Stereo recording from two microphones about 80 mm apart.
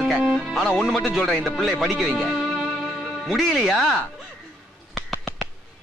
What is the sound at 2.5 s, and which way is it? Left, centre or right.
Music, centre.